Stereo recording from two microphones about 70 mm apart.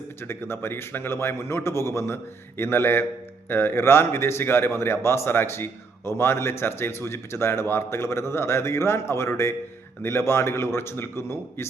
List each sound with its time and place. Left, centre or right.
0.2 s a man's voice: left